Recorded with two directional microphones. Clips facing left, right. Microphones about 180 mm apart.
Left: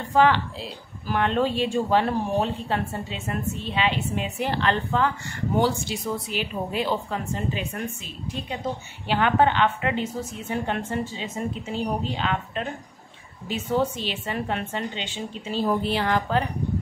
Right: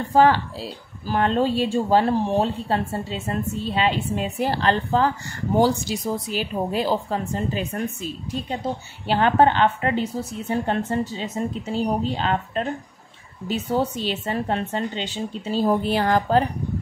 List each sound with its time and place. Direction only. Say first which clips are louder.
0.1 s speech: right 2 dB; 40° right (ahead or behind)